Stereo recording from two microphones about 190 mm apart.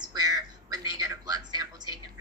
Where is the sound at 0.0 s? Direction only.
20° right (ahead or behind).